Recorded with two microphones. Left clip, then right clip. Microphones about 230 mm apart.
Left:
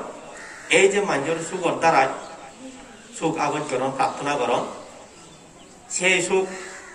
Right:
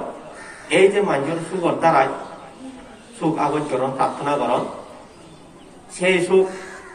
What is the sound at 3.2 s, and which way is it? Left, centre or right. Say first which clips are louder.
Speech: right 2 dB; left.